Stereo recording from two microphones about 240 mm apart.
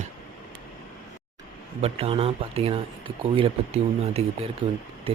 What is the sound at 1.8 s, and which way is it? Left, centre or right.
Speech, right.